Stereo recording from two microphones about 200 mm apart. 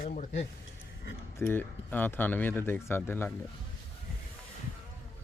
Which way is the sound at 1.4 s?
10° left (ahead or behind).